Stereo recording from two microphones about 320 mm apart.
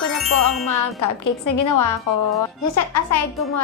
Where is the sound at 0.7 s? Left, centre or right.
Left.